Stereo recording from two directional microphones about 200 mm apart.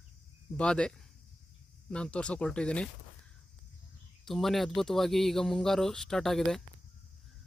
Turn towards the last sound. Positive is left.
turn(degrees=0)  # may be behind; listen again after turning